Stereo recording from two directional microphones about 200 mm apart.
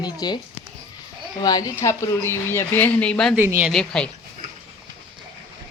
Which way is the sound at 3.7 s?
5° left (ahead or behind).